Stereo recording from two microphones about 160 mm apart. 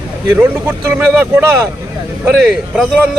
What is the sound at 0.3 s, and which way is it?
Speech, 10° right (ahead or behind).